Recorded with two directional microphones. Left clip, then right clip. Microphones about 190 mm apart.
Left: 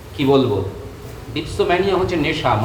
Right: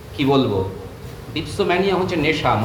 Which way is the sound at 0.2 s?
30° right (ahead or behind).